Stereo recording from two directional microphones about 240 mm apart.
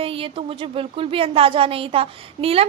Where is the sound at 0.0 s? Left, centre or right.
Right.